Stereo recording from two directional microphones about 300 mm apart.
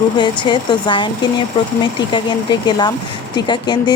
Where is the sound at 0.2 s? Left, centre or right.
Centre.